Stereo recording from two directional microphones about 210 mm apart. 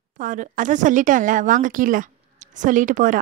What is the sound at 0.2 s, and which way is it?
Speech, 40° right (ahead or behind).